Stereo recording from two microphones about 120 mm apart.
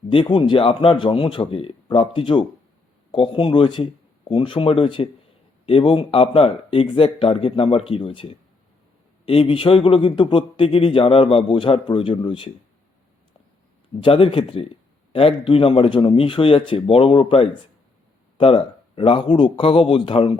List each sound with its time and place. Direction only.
0.1 s a man's voice: 45° left (ahead or behind)
14.0 s a man's voice: 45° left (ahead or behind)